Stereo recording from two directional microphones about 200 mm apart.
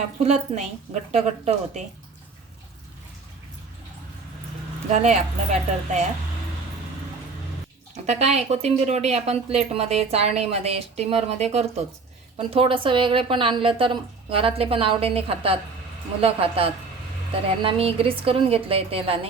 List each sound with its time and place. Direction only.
0.2 s a woman's voice: 30° right (ahead or behind)
5.0 s a woman's voice: 35° right (ahead or behind)
8.0 s a woman's voice: 35° right (ahead or behind)